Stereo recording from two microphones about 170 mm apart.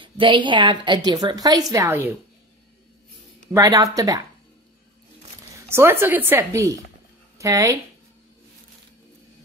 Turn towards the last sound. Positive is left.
turn(degrees=-20)  # may be behind; listen again after turning